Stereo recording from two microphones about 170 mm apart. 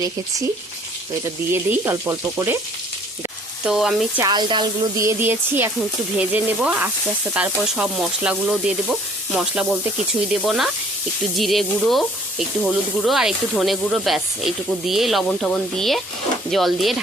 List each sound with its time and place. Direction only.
1.7 s speech: 15° right (ahead or behind)
3.6 s speech: 5° right (ahead or behind)
4.2 s speech: 25° right (ahead or behind); by 17.0 s centre (ahead or behind)